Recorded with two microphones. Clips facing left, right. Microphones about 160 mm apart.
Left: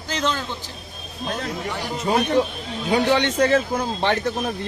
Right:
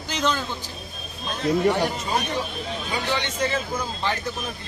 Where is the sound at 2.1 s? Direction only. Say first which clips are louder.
Left 7 dB; 60° left (ahead or behind).